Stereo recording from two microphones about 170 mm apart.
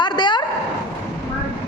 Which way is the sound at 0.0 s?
25° left (ahead or behind).